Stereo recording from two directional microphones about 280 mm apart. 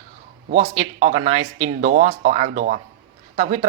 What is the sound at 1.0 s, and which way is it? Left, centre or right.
Speech, right.